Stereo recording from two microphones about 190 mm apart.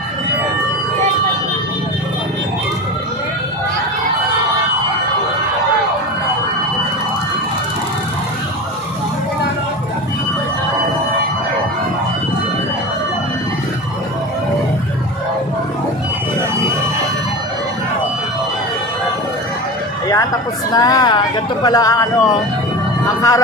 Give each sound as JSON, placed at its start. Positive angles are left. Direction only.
{"t": 20.7, "sound": "a sound", "side_deg": 20}
{"t": 21.6, "sound": "speech", "side_deg": 20}
{"t": 23.0, "sound": "vehicle", "side_deg": 20}